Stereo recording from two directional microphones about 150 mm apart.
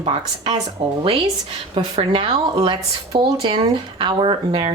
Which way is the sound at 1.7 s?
35° right (ahead or behind).